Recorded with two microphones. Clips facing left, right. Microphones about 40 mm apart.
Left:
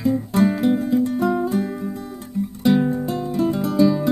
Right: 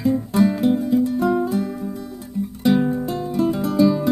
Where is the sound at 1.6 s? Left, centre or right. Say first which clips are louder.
Left 1 dB; centre.